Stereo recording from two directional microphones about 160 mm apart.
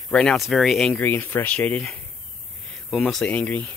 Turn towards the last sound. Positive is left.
turn(degrees=10)  # may be behind; listen again after turning